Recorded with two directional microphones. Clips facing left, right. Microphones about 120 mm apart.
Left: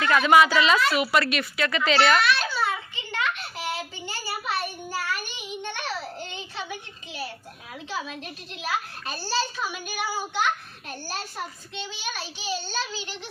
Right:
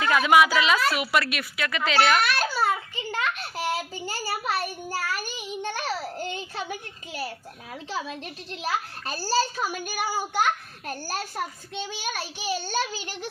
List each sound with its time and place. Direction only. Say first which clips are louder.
0.0 s a child's voice: left 1 dB; 10° right (ahead or behind)
2.2 s a sound: even; 45° right (ahead or behind)
3.3 s child singing: right 3 dB; 40° right (ahead or behind)
7.9 s a child's voice: right 1 dB; 35° right (ahead or behind)